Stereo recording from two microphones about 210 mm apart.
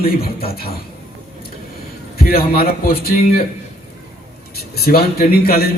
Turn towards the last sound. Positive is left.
turn(degrees=45)  # may be behind; listen again after turning